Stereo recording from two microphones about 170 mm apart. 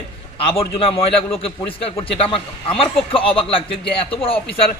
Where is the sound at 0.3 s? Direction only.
30° left (ahead or behind).